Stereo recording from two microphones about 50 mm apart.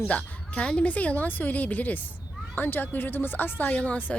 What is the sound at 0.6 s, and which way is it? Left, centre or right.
Speech, centre.